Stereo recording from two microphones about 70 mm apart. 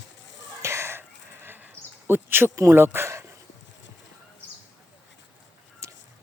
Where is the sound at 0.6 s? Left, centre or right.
Right.